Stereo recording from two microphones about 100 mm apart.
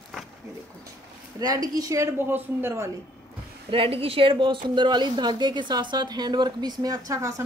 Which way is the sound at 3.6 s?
65° right (ahead or behind).